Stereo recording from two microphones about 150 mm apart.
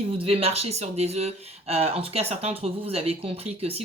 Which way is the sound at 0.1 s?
40° right (ahead or behind).